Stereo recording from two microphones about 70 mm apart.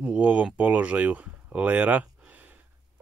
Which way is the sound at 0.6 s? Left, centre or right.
Right.